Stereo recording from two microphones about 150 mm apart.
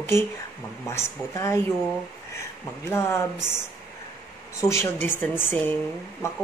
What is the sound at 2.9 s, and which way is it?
Speech, 15° left (ahead or behind).